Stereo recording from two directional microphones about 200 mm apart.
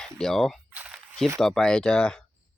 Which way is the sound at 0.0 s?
5° left (ahead or behind).